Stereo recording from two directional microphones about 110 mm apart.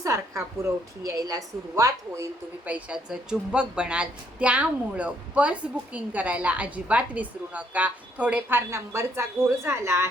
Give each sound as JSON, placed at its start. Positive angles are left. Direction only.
{"t": 0.0, "sound": "a woman's voice", "side_deg": -25}
{"t": 2.6, "sound": "a woman's voice", "side_deg": -15}